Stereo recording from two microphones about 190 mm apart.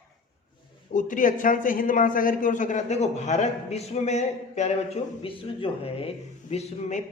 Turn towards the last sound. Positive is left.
turn(degrees=35)  # may be behind; listen again after turning